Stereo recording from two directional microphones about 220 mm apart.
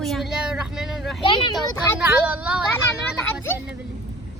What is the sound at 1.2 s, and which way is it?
Speech, 20° left (ahead or behind).